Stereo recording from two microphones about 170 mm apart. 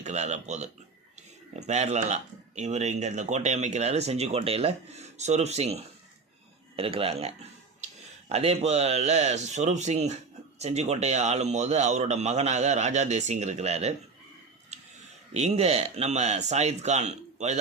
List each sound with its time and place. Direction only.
0.0 s speech: 45° right (ahead or behind)
15.3 s speech: 40° right (ahead or behind)